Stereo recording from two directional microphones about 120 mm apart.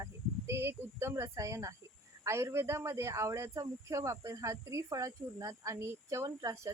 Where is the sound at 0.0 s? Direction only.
20° right (ahead or behind).